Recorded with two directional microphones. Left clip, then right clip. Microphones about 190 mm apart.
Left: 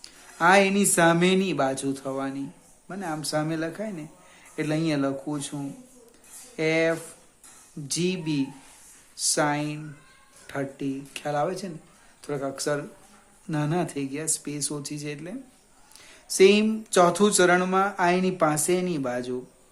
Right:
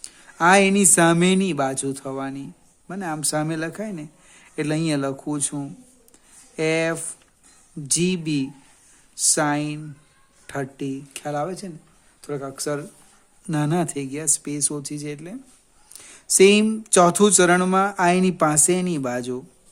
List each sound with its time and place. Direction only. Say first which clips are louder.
0.0 s speech: right 3 dB; 50° right (ahead or behind)
13.5 s speech: right 4 dB; 50° right (ahead or behind)
15.9 s speech: right 9 dB; 50° right (ahead or behind)